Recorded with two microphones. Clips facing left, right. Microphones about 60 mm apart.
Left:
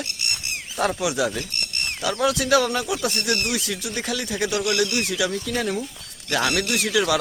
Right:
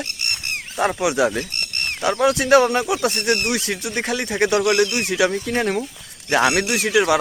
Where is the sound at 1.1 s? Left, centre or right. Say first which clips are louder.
Right 5 dB; right.